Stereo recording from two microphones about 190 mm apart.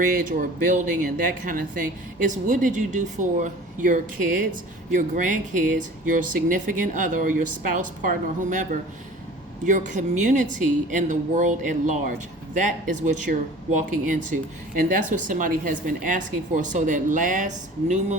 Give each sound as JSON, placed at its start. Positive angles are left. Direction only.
{"t": 0.0, "sound": "speech", "side_deg": -45}